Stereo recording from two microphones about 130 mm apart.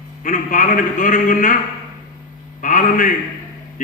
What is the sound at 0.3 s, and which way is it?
A man's voice, 90° left.